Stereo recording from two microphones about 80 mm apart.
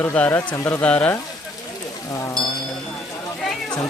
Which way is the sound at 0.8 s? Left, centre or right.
Centre.